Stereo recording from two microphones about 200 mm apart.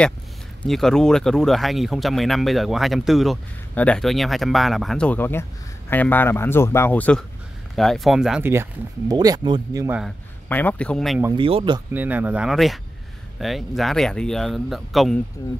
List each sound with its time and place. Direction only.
0.6 s speech: centre (ahead or behind); by 9.8 s 20° right (ahead or behind)
9.8 s speech: 5° right (ahead or behind)
10.5 s speech: 10° left (ahead or behind)
11.3 s speech: 25° right (ahead or behind)
11.9 s speech: 10° right (ahead or behind)